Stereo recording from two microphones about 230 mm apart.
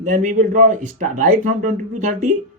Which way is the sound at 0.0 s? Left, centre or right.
Right.